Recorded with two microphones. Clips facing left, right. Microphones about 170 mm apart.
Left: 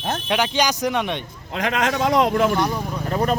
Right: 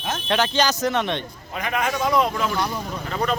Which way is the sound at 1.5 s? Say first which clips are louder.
Left 3 dB; 90° left.